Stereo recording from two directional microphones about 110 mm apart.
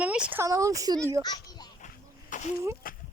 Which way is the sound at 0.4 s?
30° right (ahead or behind).